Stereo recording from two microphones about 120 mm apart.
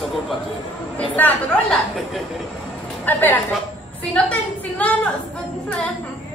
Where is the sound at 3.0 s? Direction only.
15° left (ahead or behind).